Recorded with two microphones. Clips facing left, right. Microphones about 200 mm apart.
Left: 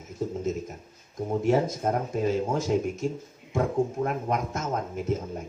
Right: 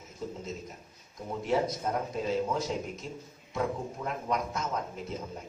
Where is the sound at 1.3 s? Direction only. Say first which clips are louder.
Left 5 dB; 50° left (ahead or behind).